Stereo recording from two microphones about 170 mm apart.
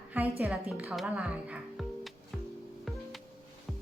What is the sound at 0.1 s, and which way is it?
A woman's voice, 10° right (ahead or behind).